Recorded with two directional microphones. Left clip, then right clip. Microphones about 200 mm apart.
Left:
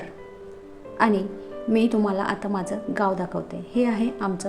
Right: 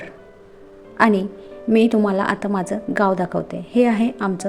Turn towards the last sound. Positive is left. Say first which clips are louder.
# right 4 dB
turn(degrees=-20)  # may be behind; listen again after turning